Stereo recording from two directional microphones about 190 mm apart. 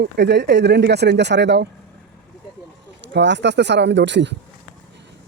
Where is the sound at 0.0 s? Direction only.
60° right (ahead or behind).